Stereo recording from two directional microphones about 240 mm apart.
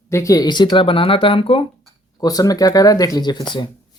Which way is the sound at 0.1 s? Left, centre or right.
Centre.